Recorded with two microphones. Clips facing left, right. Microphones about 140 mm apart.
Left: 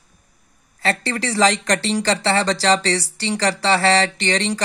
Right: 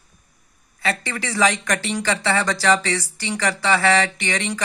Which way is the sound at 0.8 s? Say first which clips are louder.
Left 3 dB; 35° left (ahead or behind).